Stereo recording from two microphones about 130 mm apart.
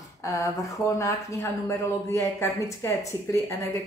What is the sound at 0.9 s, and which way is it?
Speech, 20° left (ahead or behind).